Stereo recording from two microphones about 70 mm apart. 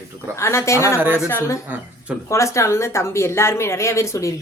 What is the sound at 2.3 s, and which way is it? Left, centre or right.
A woman's voice, left.